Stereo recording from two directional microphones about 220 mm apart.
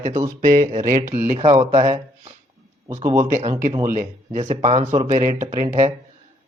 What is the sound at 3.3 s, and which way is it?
Speech, 30° right (ahead or behind).